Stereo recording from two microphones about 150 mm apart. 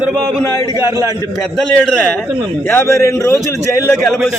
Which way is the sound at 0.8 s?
20° right (ahead or behind).